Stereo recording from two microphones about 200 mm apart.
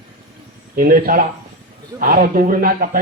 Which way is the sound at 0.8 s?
45° right (ahead or behind).